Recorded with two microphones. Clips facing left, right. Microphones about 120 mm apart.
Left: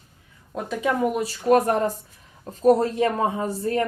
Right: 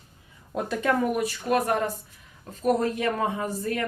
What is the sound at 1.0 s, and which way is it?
Speech, 25° left (ahead or behind).